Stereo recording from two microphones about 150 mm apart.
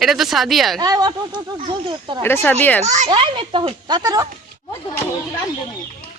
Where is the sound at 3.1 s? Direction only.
35° right (ahead or behind).